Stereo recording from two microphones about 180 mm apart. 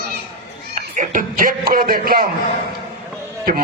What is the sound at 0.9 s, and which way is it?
A man's voice, 45° right (ahead or behind).